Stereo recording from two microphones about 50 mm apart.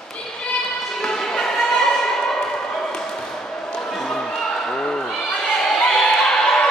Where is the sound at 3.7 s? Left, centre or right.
Centre.